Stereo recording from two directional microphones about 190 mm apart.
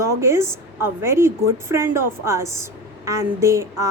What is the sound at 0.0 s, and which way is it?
A woman's voice, 15° right (ahead or behind).